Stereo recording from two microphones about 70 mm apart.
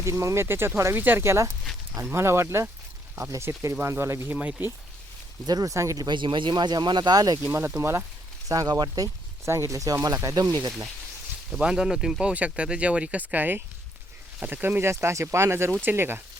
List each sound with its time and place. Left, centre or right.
0.0 s speech: right
4.3 s speech: right
5.5 s speech: right
5.7 s speech: right
6.0 s speech: right
7.8 s speech: right
8.4 s speech: right
9.5 s speech: right
11.5 s speech: centre
12.2 s speech: centre